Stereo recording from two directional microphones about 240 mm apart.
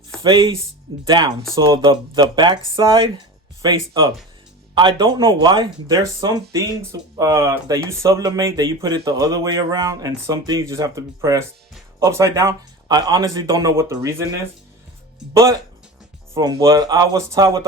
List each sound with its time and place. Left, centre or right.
0.2 s speech: right
15.3 s speech: centre